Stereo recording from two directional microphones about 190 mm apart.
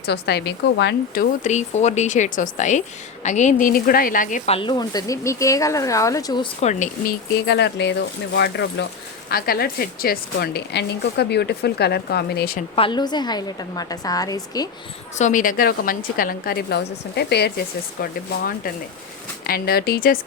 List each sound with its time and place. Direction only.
0.0 s a woman's voice: 60° left (ahead or behind); by 6.5 s 20° left (ahead or behind)
6.6 s speech: 40° left (ahead or behind)
7.4 s speech: 65° left (ahead or behind)
9.3 s speech: 50° left (ahead or behind)
12.7 s a woman's voice: 25° left (ahead or behind)
15.2 s a woman's voice: 45° left (ahead or behind)